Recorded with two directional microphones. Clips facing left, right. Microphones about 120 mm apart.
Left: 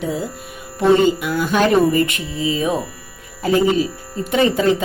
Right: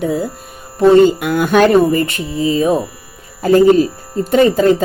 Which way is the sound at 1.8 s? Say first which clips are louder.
Right 2 dB; 35° right (ahead or behind).